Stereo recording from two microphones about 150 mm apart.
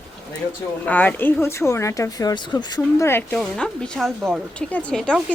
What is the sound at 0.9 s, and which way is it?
A woman's voice, 10° left (ahead or behind).